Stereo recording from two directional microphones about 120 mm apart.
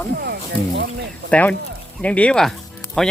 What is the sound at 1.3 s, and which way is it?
Speech, 10° left (ahead or behind).